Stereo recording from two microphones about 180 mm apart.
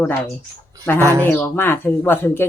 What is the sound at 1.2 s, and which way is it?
Speech, 10° left (ahead or behind).